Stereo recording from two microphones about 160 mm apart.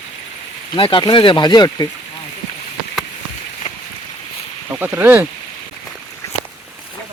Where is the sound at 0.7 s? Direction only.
30° left (ahead or behind).